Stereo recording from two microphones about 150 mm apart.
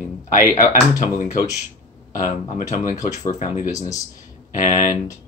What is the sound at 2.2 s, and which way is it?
Speech, 55° left (ahead or behind).